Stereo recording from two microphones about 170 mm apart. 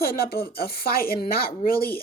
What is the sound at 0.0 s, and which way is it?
Speech, 65° left (ahead or behind).